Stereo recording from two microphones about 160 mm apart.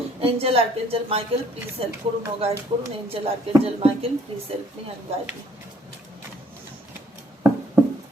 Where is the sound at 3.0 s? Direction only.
35° right (ahead or behind).